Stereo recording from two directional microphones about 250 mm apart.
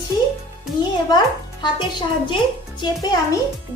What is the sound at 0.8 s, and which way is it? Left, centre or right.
A child's voice, centre.